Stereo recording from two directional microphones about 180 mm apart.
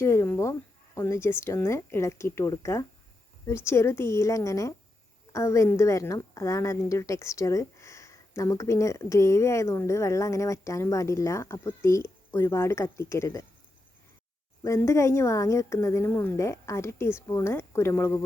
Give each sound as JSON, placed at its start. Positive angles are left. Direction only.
{"t": 0.0, "sound": "a woman's voice", "side_deg": 15}
{"t": 14.6, "sound": "a woman's voice", "side_deg": 15}